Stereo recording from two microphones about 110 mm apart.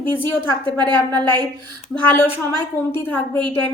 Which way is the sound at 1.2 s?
40° right (ahead or behind).